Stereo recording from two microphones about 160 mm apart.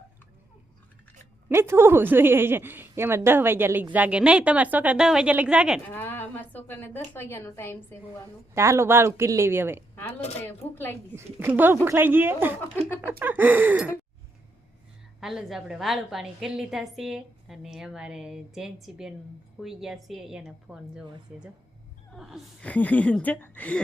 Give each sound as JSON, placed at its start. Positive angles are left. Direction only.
{"t": 1.5, "sound": "a woman's voice", "side_deg": -15}
{"t": 5.9, "sound": "a woman's voice", "side_deg": 15}
{"t": 8.5, "sound": "a woman's voice", "side_deg": -15}
{"t": 10.4, "sound": "a woman's voice", "side_deg": 10}
{"t": 11.2, "sound": "a woman's voice", "side_deg": -10}
{"t": 15.2, "sound": "a woman's voice", "side_deg": 0}